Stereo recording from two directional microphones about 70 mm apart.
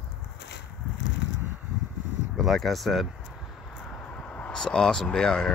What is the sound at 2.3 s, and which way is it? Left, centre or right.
Speech, centre.